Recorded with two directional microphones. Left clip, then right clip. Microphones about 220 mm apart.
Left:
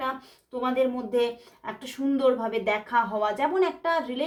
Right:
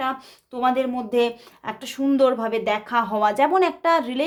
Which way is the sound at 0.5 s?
35° right (ahead or behind).